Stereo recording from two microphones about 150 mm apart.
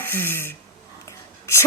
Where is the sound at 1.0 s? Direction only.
20° left (ahead or behind).